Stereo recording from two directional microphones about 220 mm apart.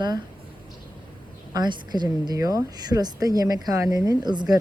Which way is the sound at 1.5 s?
20° right (ahead or behind).